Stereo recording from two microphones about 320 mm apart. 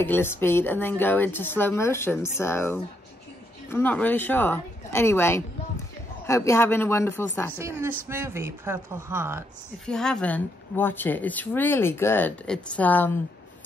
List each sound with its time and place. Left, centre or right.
0.0 s speech: centre
7.5 s speech: centre